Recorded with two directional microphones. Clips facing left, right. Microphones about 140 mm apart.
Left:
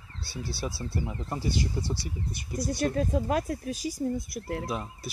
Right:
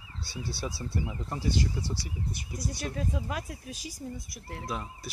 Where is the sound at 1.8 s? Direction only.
35° left (ahead or behind).